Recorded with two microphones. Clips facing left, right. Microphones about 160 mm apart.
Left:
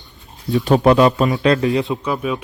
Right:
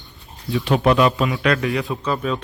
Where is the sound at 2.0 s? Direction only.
10° left (ahead or behind).